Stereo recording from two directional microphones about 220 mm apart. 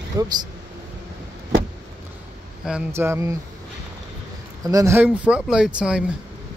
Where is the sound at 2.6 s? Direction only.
5° right (ahead or behind).